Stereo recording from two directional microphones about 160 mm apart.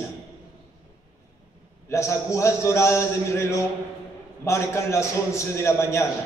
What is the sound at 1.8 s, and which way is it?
A man's voice, 15° left (ahead or behind).